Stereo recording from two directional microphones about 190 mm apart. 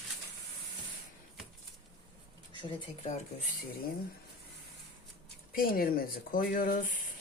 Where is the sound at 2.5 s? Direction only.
25° left (ahead or behind).